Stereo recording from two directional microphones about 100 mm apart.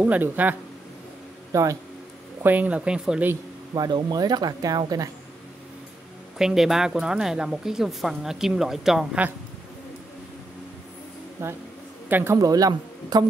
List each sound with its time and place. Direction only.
0.0 s speech: 15° right (ahead or behind)
1.5 s speech: 35° right (ahead or behind)
2.4 s speech: 15° right (ahead or behind)
3.7 s speech: 40° right (ahead or behind)
6.3 s speech: 5° right (ahead or behind)
11.4 s a man's voice: 25° right (ahead or behind)
12.4 s speech: 35° right (ahead or behind)